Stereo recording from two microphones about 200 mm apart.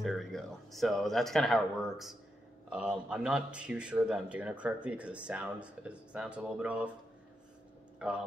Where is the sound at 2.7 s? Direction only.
5° right (ahead or behind).